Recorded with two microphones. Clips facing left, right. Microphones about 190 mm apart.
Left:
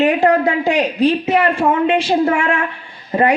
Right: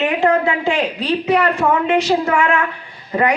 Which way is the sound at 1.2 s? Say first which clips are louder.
Left 1 dB; 25° left (ahead or behind).